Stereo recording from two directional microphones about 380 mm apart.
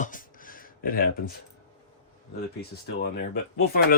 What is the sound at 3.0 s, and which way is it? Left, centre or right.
Speech, left.